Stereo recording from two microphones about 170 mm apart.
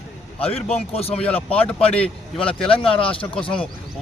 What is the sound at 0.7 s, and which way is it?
Speech, 35° left (ahead or behind).